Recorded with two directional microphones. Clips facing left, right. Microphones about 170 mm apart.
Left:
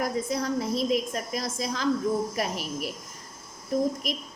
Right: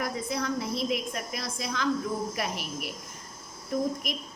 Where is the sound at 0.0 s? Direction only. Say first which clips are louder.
Left 3 dB; 40° left (ahead or behind).